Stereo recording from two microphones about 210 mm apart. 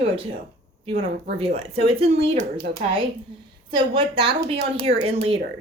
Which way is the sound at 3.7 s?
25° right (ahead or behind).